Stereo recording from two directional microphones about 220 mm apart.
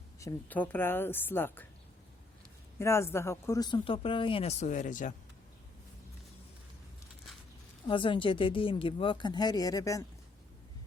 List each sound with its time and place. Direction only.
0.2 s a woman's voice: 10° left (ahead or behind)
2.7 s speech: 10° left (ahead or behind); by 5.1 s 35° left (ahead or behind)
7.9 s speech: 25° left (ahead or behind)